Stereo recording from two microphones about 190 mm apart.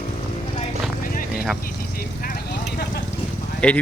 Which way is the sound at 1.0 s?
45° left (ahead or behind).